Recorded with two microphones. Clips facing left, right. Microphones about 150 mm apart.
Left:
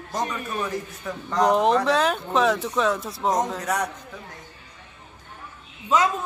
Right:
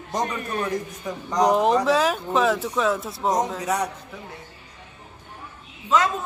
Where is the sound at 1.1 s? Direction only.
15° right (ahead or behind).